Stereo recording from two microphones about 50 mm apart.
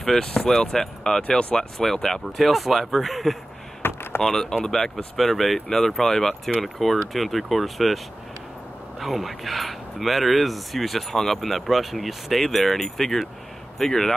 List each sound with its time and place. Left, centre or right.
0.0 s speech: centre
2.2 s speech: centre
3.8 s a sound: left
4.2 s speech: centre
9.0 s speech: centre